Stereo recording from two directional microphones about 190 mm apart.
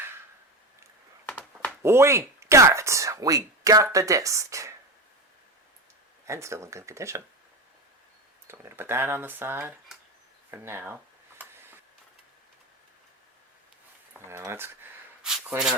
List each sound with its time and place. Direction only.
1.8 s speech: 15° right (ahead or behind)
6.2 s speech: 15° right (ahead or behind)
8.4 s speech: 10° right (ahead or behind)
14.1 s a sound: 15° right (ahead or behind)